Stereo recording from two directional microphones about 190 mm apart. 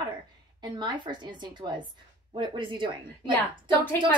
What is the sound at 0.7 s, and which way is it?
A woman's voice, 25° right (ahead or behind).